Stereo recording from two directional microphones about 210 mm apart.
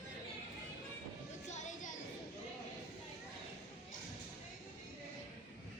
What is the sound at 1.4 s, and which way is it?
Music, 35° left (ahead or behind).